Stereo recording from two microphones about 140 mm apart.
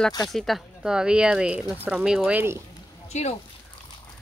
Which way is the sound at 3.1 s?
55° left (ahead or behind).